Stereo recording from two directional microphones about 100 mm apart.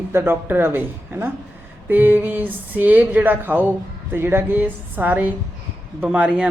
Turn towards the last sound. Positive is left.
turn(degrees=-10)  # may be behind; listen again after turning